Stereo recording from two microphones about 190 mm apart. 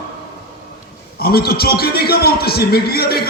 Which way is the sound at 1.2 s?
55° left (ahead or behind).